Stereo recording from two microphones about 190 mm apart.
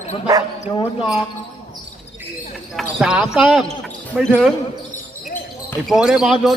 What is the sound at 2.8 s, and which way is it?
Speech, 5° right (ahead or behind).